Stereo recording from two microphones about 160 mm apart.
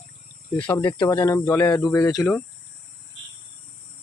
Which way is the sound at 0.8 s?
30° left (ahead or behind).